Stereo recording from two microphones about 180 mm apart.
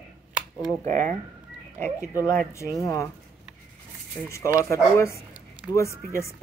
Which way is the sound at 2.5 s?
15° left (ahead or behind).